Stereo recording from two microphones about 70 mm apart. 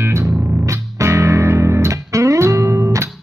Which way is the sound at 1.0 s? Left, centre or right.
Right.